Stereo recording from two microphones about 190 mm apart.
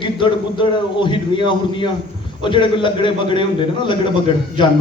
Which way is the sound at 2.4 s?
25° left (ahead or behind).